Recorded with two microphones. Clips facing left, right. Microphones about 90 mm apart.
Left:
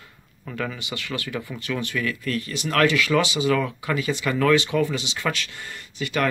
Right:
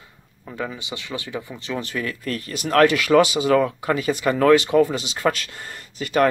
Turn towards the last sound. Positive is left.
turn(degrees=-40)  # may be behind; listen again after turning